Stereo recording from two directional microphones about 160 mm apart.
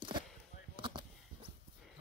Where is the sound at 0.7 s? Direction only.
30° right (ahead or behind).